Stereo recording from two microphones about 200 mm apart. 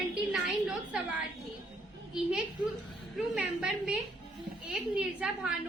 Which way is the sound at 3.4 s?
5° right (ahead or behind).